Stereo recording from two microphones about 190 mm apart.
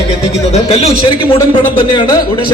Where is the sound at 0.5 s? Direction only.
35° left (ahead or behind).